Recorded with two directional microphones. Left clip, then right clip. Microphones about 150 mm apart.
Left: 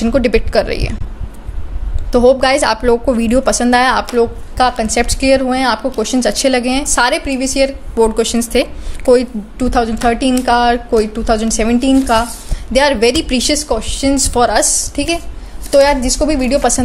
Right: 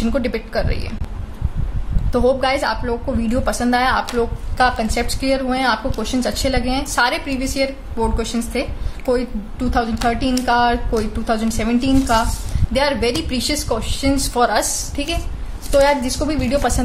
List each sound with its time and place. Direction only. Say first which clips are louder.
0.0 s a woman's voice: left 8 dB; 40° left (ahead or behind)
2.1 s a woman's voice: left 7 dB; 40° left (ahead or behind)
2.8 s a woman's voice: left 10 dB; 65° left (ahead or behind); by 4.0 s 45° left (ahead or behind)
4.1 s a woman's voice: left 7 dB; 35° left (ahead or behind)
8.0 s a woman's voice: left 9 dB; 55° left (ahead or behind)